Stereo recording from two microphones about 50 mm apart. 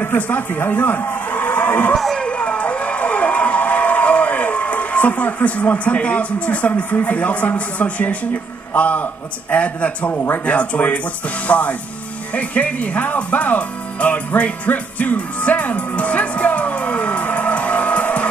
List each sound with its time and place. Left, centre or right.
0.0 s speech: left
2.1 s a sound: left
8.7 s a man's voice: left